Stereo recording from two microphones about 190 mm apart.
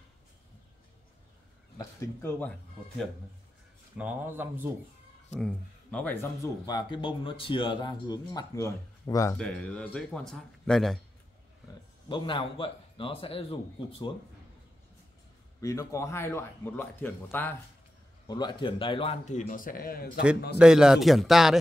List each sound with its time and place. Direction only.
1.8 s speech: 10° left (ahead or behind)
4.0 s speech: 10° right (ahead or behind)
5.3 s speech: centre (ahead or behind)
6.6 s speech: 25° left (ahead or behind)
9.4 s speech: 5° left (ahead or behind)
12.1 s speech: 25° left (ahead or behind)
15.6 s a man's voice: 15° left (ahead or behind); by 20.2 s 50° left (ahead or behind)
20.5 s speech: 5° right (ahead or behind)